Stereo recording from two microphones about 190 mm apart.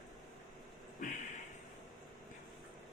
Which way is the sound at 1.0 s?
40° left (ahead or behind).